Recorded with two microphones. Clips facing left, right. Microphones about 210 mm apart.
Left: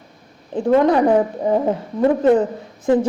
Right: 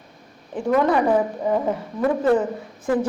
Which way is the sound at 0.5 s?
25° left (ahead or behind).